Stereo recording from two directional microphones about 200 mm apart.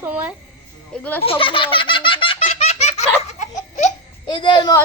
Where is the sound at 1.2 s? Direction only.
25° left (ahead or behind).